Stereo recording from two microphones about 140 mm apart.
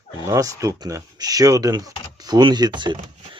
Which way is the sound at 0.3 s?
25° right (ahead or behind).